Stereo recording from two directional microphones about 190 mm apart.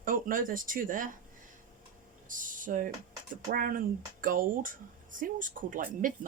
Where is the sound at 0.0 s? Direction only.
45° right (ahead or behind).